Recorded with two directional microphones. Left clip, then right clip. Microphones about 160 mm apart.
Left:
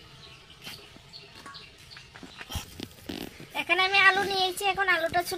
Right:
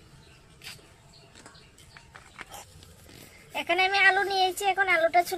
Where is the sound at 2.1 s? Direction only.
30° right (ahead or behind).